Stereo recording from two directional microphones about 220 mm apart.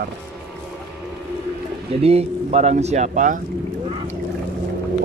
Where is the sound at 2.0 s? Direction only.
30° right (ahead or behind).